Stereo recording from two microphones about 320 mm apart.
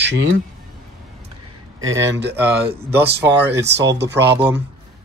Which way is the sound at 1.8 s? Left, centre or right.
Right.